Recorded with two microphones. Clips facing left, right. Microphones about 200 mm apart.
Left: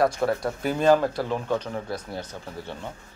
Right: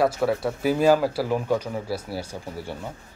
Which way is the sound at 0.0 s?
5° right (ahead or behind).